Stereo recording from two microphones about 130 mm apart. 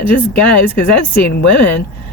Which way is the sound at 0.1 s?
15° left (ahead or behind).